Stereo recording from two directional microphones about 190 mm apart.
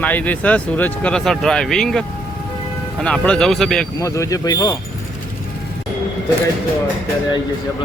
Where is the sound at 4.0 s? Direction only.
15° left (ahead or behind).